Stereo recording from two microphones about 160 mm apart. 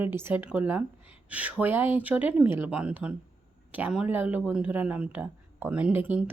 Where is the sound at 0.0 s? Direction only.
15° right (ahead or behind).